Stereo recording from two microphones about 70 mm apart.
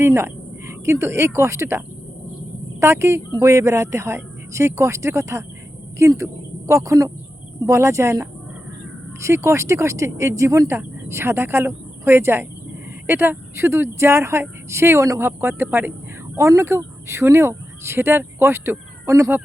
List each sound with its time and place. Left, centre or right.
0.0 s speech: right
2.8 s speech: right
15.3 s speech: right